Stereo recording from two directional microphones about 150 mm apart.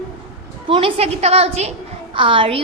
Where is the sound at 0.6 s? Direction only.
35° right (ahead or behind).